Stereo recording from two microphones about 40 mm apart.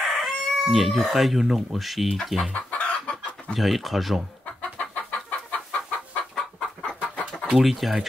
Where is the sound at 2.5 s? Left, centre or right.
Left.